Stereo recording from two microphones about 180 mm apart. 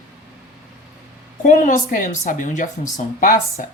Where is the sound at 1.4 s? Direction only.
50° left (ahead or behind).